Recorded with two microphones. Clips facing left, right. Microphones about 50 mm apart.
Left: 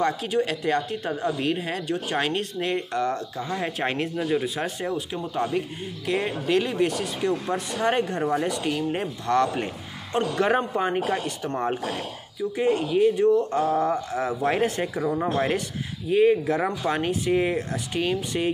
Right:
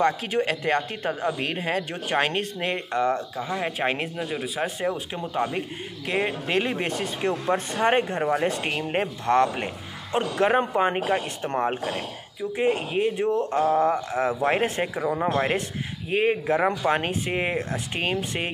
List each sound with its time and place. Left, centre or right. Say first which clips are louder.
0.0 s speech: right 1 dB; right
3.3 s speech: even; centre
4.3 s speech: left 4 dB; centre
4.6 s speech: right 1 dB; right
8.5 s speech: left 1 dB; right
12.8 s speech: left 4 dB; right
13.5 s speech: right 1 dB; centre
13.7 s speech: right 2 dB; right